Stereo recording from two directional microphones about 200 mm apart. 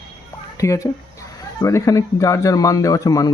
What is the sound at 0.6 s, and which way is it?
Speech, 15° left (ahead or behind).